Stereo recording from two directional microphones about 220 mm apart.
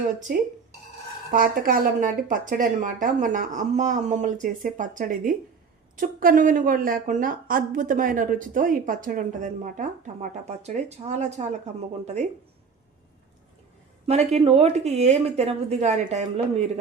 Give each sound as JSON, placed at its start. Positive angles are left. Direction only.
{"t": 0.3, "sound": "a woman's voice", "side_deg": -40}
{"t": 14.1, "sound": "speech", "side_deg": -30}